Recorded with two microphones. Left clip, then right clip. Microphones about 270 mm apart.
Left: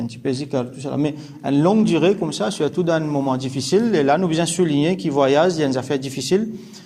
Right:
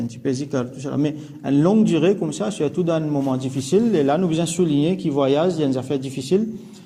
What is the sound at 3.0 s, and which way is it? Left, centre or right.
Speech, left.